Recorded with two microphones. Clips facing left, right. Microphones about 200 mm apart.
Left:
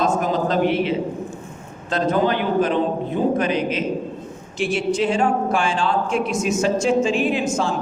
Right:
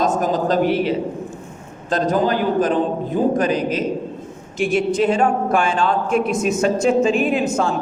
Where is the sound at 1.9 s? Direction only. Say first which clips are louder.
Right 1 dB; 40° right (ahead or behind).